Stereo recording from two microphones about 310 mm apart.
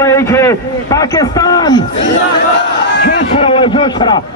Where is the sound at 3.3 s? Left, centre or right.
Centre.